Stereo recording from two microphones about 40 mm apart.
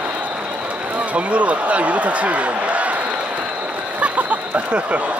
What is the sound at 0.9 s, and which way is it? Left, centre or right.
Speech, right.